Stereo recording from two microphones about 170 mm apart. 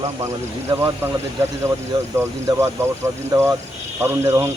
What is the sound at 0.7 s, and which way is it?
Speech, 15° right (ahead or behind).